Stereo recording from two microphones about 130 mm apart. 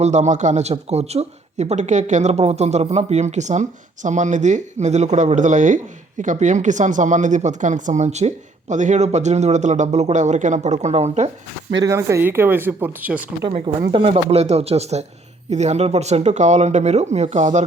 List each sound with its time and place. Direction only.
0.0 s speech: 65° right (ahead or behind)
11.8 s speech: 20° right (ahead or behind)
13.9 s speech: 50° right (ahead or behind)